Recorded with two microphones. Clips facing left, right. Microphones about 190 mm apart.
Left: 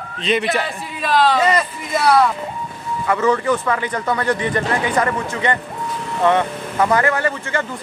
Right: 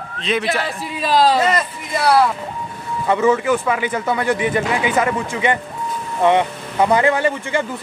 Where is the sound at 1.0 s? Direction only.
40° right (ahead or behind).